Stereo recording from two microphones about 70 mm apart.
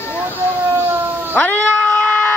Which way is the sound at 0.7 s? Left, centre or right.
Right.